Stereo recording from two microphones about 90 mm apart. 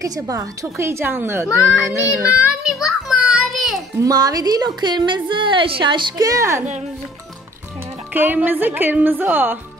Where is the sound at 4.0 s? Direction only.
45° right (ahead or behind); by 6.1 s 65° right (ahead or behind).